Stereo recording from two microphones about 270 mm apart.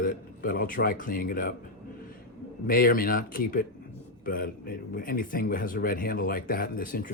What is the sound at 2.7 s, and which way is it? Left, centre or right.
Speech, left.